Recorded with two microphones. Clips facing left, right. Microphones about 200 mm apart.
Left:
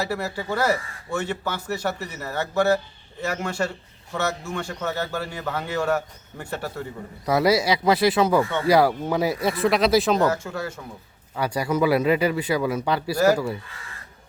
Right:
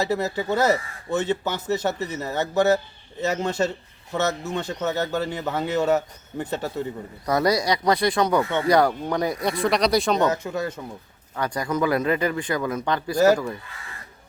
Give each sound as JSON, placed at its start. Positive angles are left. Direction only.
{"t": 0.0, "sound": "a man's voice", "side_deg": -20}
{"t": 7.3, "sound": "speech", "side_deg": 5}
{"t": 10.2, "sound": "a man's voice", "side_deg": -20}
{"t": 11.3, "sound": "speech", "side_deg": 10}